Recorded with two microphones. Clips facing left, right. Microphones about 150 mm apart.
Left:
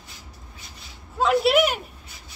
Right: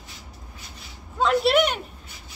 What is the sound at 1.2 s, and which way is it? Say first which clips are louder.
Speech: left 1 dB; 5° left (ahead or behind).